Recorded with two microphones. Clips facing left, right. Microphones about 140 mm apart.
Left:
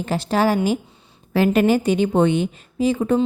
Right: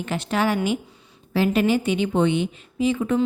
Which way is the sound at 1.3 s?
50° left (ahead or behind).